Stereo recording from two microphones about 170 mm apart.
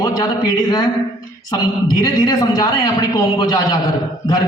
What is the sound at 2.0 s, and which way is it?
Speech, 20° left (ahead or behind).